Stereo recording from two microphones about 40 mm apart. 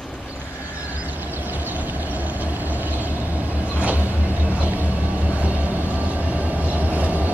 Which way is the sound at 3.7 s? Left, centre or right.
Right.